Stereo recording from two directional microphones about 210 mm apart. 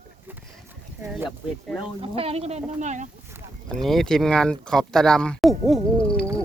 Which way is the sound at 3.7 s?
Centre (ahead or behind).